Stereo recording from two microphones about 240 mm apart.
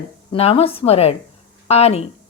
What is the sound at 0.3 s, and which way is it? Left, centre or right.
Speech, left.